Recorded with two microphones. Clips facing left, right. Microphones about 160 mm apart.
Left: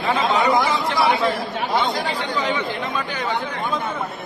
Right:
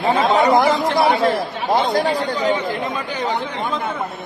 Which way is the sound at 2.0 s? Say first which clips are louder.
Right 5 dB; 45° right (ahead or behind).